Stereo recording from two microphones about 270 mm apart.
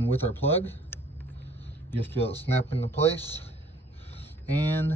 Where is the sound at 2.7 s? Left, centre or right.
Left.